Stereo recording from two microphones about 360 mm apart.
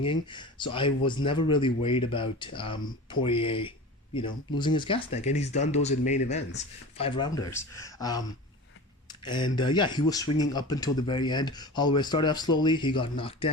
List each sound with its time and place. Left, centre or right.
0.0 s speech: centre
9.2 s speech: centre